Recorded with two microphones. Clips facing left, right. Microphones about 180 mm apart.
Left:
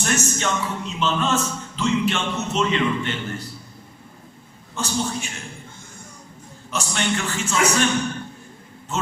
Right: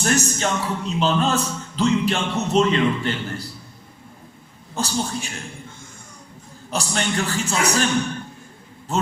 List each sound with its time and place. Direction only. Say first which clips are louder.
0.0 s a man's voice: right 2 dB; 35° right (ahead or behind)
4.7 s a man's voice: right 1 dB; 35° right (ahead or behind)
6.7 s a man's voice: even; 35° right (ahead or behind)